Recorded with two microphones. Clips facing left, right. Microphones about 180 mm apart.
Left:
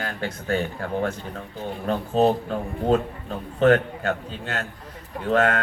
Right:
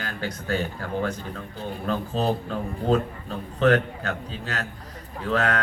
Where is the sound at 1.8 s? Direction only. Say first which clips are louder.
Left 5 dB; 40° left (ahead or behind).